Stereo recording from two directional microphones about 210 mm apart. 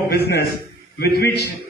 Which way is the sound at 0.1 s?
50° left (ahead or behind).